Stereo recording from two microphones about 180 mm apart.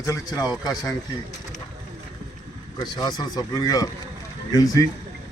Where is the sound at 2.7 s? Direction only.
25° left (ahead or behind).